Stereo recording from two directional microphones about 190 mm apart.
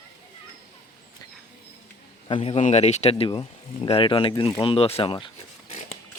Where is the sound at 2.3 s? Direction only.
30° left (ahead or behind).